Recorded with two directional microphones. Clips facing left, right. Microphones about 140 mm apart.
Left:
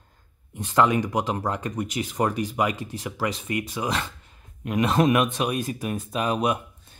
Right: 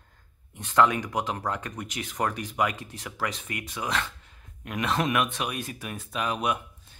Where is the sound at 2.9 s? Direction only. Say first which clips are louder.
Left 5 dB; 10° left (ahead or behind).